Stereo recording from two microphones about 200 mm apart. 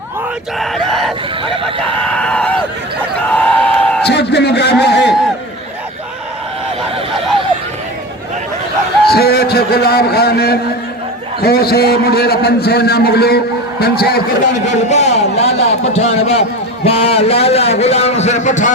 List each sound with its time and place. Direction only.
0.6 s speech: centre (ahead or behind)
3.2 s a sound: 5° left (ahead or behind)
4.0 s a man's voice: 55° left (ahead or behind)
9.0 s a man's voice: 50° left (ahead or behind)
14.7 s speech: 35° left (ahead or behind)